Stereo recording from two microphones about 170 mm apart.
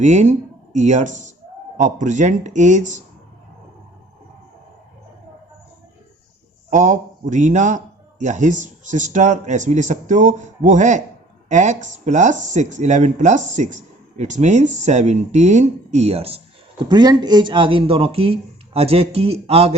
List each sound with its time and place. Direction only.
0.0 s speech: 45° right (ahead or behind)
6.7 s speech: 45° right (ahead or behind)
16.9 s speech: 25° right (ahead or behind)